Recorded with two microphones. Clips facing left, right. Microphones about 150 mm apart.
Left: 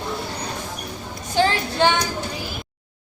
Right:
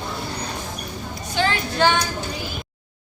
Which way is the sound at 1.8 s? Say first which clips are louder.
Even; 20° left (ahead or behind).